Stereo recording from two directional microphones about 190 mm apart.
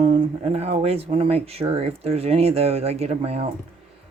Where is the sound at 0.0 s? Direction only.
35° right (ahead or behind).